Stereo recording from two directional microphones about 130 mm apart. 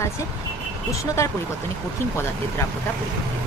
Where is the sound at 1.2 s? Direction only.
20° left (ahead or behind).